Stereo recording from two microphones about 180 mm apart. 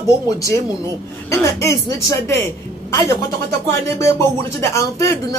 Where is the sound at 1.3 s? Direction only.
15° left (ahead or behind).